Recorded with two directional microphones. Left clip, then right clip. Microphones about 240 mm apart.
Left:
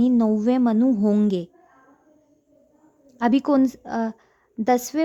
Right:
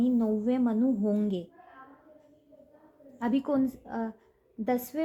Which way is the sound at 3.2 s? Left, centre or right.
Left.